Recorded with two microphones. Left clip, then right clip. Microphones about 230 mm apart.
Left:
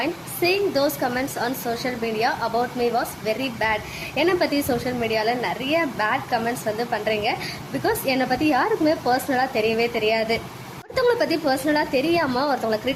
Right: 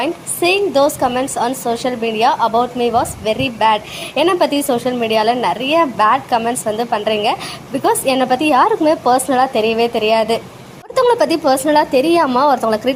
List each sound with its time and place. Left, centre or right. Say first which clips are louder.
0.0 s a woman's voice: right 6 dB; centre